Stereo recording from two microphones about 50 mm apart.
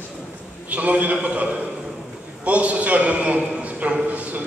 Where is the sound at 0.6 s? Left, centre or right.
Right.